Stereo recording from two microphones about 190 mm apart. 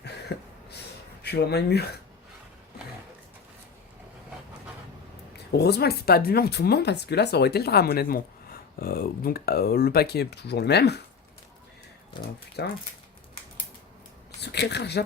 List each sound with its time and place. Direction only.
0.0 s a sound: 60° left (ahead or behind)
1.2 s speech: 60° left (ahead or behind)
5.5 s speech: 60° left (ahead or behind)
12.6 s speech: 60° left (ahead or behind)
14.4 s speech: 60° left (ahead or behind)